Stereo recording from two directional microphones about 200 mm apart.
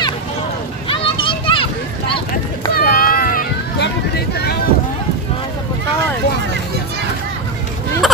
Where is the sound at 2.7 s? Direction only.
45° left (ahead or behind).